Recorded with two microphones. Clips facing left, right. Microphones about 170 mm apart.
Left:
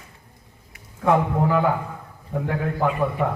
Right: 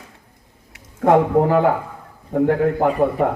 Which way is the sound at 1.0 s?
50° right (ahead or behind).